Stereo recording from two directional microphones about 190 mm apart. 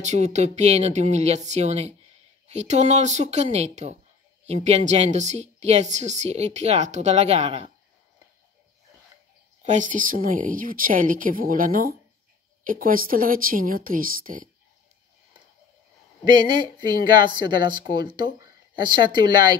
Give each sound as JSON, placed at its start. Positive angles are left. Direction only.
{"t": 0.0, "sound": "a woman's voice", "side_deg": -35}
{"t": 9.6, "sound": "a woman's voice", "side_deg": -40}
{"t": 17.3, "sound": "speech", "side_deg": -25}